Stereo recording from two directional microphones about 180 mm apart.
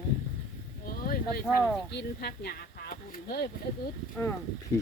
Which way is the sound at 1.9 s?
65° left (ahead or behind).